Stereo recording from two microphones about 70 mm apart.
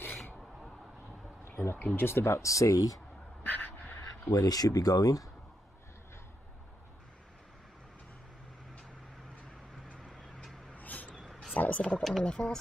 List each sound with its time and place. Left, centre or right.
1.5 s speech: left
3.4 s dog: left
4.3 s speech: left
9.9 s fowl: centre
10.7 s a sound: left
11.8 s speech: centre